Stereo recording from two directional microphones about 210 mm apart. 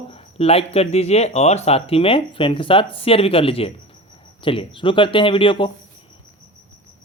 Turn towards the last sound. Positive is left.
turn(degrees=25)  # may be behind; listen again after turning